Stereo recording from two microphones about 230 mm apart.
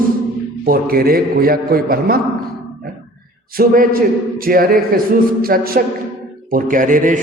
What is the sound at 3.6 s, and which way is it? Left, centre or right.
A man's voice, right.